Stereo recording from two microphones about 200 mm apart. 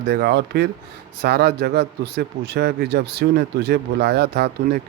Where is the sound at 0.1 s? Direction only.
55° right (ahead or behind).